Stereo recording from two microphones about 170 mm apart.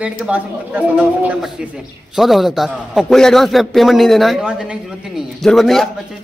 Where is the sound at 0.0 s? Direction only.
10° right (ahead or behind).